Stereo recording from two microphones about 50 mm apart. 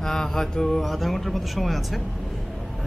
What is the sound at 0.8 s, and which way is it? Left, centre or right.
Speech, centre.